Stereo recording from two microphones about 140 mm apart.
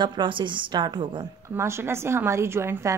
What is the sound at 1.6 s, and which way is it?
A woman's voice, 20° right (ahead or behind).